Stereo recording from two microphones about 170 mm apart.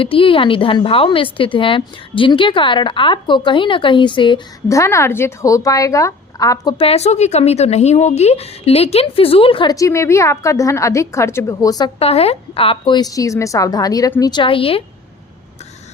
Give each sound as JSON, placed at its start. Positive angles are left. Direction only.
{"t": 0.0, "sound": "a woman's voice", "side_deg": 30}
{"t": 4.7, "sound": "a woman's voice", "side_deg": 15}
{"t": 11.9, "sound": "a woman's voice", "side_deg": 35}